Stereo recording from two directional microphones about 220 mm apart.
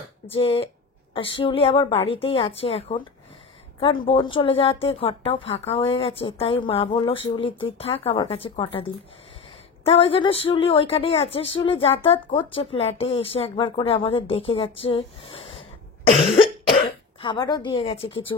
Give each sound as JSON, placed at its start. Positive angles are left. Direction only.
{"t": 0.3, "sound": "a woman's voice", "side_deg": 25}